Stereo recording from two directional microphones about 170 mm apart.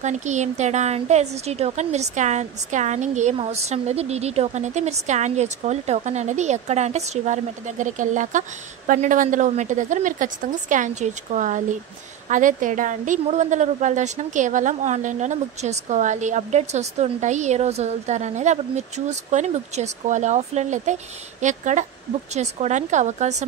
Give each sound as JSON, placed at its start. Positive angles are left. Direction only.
{"t": 0.0, "sound": "speech", "side_deg": -45}